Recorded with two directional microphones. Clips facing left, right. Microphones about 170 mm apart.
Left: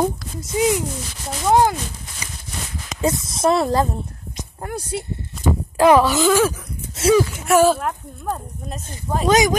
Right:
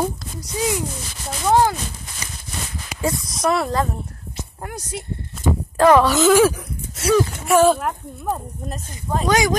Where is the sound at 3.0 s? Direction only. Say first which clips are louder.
Left 3 dB; 25° left (ahead or behind).